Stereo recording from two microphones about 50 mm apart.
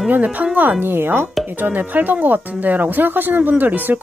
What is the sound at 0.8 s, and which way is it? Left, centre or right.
Speech, right.